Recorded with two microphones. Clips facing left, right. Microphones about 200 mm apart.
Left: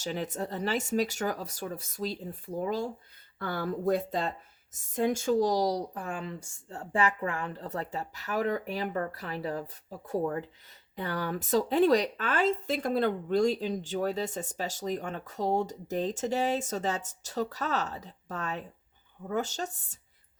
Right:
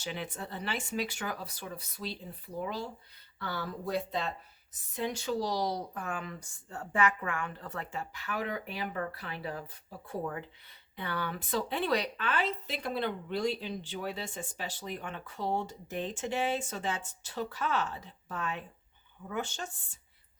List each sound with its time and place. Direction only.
0.0 s a woman's voice: 40° left (ahead or behind)